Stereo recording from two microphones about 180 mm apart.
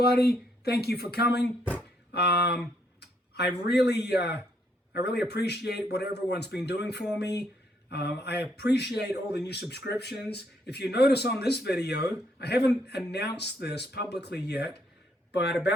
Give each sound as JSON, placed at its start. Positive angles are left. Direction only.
{"t": 0.0, "sound": "speech", "side_deg": 60}
{"t": 3.7, "sound": "speech", "side_deg": 70}